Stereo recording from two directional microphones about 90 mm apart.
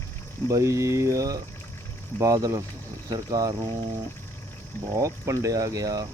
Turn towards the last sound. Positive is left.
turn(degrees=-40)  # may be behind; listen again after turning